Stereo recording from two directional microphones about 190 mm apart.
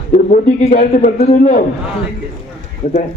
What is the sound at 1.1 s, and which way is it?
Speech, 35° left (ahead or behind).